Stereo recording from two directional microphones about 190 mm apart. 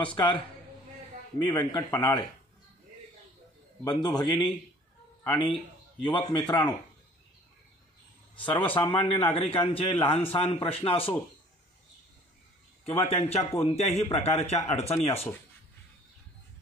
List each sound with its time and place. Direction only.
0.0 s a man's voice: 25° left (ahead or behind)
1.4 s a man's voice: 20° left (ahead or behind)
3.8 s a man's voice: 20° left (ahead or behind)
8.7 s a man's voice: 25° left (ahead or behind)
12.8 s speech: 30° left (ahead or behind)